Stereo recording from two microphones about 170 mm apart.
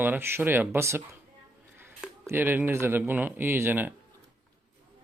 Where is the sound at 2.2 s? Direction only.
10° right (ahead or behind).